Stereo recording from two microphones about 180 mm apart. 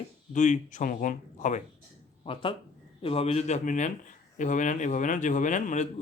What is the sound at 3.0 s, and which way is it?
Speech, 30° left (ahead or behind).